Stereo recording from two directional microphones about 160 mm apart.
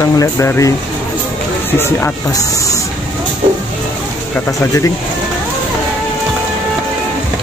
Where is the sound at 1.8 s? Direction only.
15° left (ahead or behind).